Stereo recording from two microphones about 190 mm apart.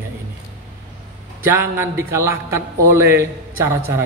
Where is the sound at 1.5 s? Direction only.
15° right (ahead or behind).